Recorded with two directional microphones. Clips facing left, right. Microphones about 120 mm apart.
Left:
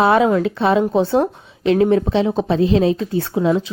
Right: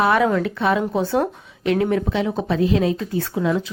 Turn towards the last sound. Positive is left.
turn(degrees=25)  # may be behind; listen again after turning